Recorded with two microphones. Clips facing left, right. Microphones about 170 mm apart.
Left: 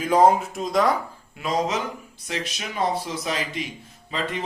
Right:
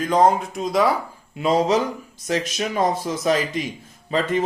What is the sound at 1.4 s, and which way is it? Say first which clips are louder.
Speech: right 6 dB; 30° right (ahead or behind).